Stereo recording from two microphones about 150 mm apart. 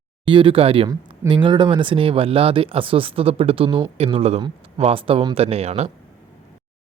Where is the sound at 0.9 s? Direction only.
30° right (ahead or behind); by 5.9 s 45° right (ahead or behind).